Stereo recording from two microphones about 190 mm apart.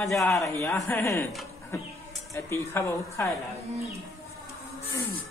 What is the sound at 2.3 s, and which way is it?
A woman's voice, 15° left (ahead or behind).